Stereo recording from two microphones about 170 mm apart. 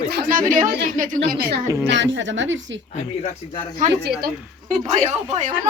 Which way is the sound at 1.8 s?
90° right.